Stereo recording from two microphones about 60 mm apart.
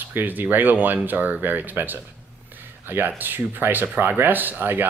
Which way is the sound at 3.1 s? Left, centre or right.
Right.